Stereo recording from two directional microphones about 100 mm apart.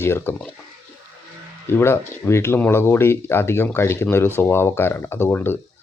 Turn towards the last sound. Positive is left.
turn(degrees=20)  # may be behind; listen again after turning